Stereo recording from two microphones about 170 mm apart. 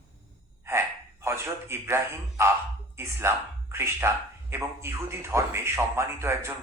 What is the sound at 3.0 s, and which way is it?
Speech, 15° right (ahead or behind).